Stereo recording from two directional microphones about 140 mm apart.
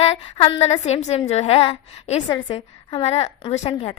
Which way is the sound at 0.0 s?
45° left (ahead or behind).